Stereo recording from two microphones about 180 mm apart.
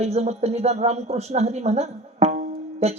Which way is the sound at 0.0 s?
35° right (ahead or behind).